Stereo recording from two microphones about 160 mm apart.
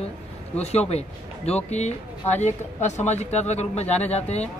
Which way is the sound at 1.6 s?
45° left (ahead or behind).